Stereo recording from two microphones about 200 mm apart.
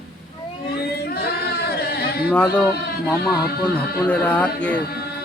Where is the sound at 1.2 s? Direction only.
50° left (ahead or behind).